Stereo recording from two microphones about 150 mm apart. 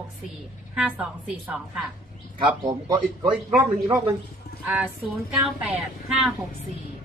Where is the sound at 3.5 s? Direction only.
15° right (ahead or behind).